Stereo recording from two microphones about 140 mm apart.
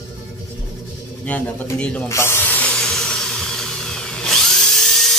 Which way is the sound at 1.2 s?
10° left (ahead or behind).